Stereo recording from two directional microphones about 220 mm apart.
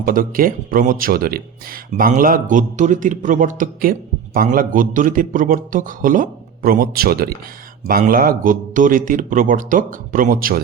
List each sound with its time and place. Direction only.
0.0 s speech: 40° right (ahead or behind)